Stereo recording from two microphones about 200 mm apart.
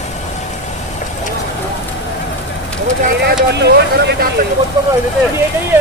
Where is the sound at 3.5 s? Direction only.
55° right (ahead or behind).